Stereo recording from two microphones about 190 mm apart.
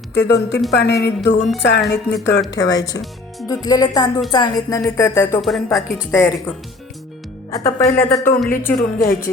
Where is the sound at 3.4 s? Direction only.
20° left (ahead or behind).